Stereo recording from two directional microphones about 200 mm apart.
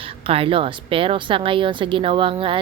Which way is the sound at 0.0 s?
30° right (ahead or behind).